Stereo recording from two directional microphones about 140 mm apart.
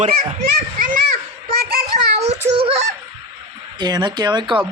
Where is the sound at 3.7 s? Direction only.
30° right (ahead or behind).